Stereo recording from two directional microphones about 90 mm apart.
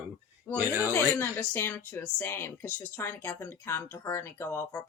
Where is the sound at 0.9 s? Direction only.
25° left (ahead or behind).